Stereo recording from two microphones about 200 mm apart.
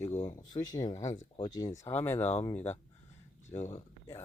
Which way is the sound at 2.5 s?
35° left (ahead or behind).